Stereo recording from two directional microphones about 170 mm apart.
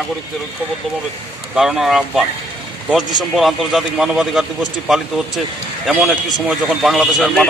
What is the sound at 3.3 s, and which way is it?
A man's voice, centre (ahead or behind).